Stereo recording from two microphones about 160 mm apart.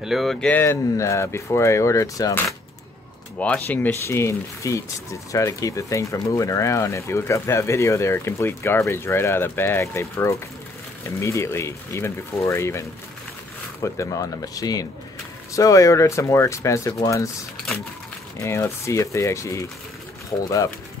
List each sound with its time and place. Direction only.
0.0 s speech: centre (ahead or behind); by 2.4 s 20° left (ahead or behind)
3.3 s speech: 10° left (ahead or behind)
13.9 s speech: 20° left (ahead or behind)
18.4 s speech: 15° left (ahead or behind)